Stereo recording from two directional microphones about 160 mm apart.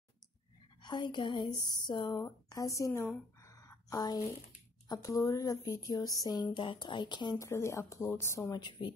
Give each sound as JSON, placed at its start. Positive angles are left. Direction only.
{"t": 0.8, "sound": "speech", "side_deg": 30}